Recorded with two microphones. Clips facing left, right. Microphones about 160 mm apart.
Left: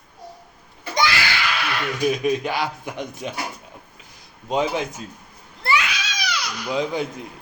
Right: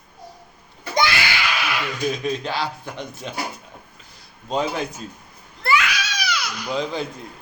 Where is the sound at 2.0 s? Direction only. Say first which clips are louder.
Left 4 dB; 15° left (ahead or behind).